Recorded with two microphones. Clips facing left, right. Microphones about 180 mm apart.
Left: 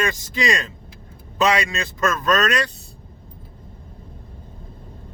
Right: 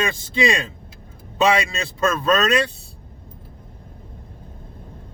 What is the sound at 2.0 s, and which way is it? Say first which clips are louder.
Speech: right 1 dB; 30° right (ahead or behind).